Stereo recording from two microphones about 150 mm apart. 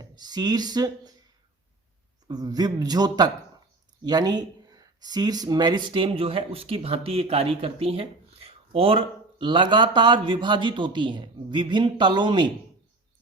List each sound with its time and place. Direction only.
0.0 s speech: 25° right (ahead or behind)
2.2 s speech: 25° right (ahead or behind)